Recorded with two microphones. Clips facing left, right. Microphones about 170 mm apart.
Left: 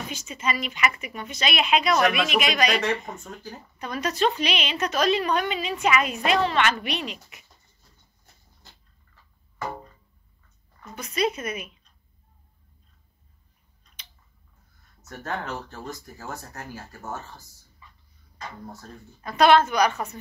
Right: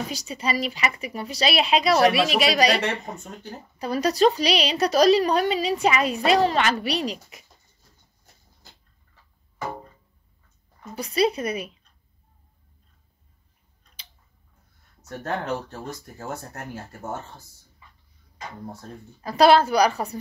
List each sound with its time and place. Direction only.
0.1 s a woman's voice: 35° right (ahead or behind)
11.0 s a woman's voice: 35° right (ahead or behind)
19.2 s a woman's voice: 35° right (ahead or behind)